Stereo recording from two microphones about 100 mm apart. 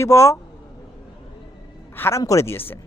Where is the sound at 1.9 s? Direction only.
25° left (ahead or behind).